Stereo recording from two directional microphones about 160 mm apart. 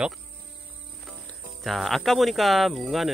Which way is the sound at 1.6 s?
Centre (ahead or behind).